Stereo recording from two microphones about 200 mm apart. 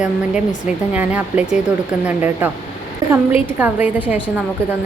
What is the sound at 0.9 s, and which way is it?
A woman's voice, 10° right (ahead or behind).